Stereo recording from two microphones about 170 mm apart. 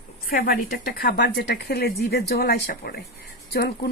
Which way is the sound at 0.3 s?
60° left (ahead or behind).